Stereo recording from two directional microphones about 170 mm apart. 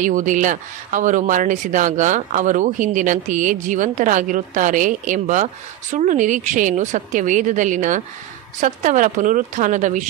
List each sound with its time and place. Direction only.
0.0 s speech: 50° right (ahead or behind)